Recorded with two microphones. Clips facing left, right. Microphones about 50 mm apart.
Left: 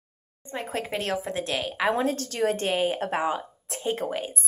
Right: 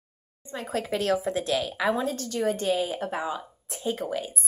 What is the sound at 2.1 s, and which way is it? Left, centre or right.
Speech, left.